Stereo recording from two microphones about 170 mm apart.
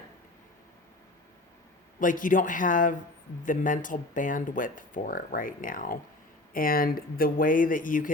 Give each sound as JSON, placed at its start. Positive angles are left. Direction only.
{"t": 2.0, "sound": "speech", "side_deg": 50}